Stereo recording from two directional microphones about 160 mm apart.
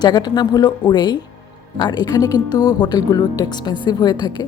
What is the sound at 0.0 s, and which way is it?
Speech, 25° left (ahead or behind).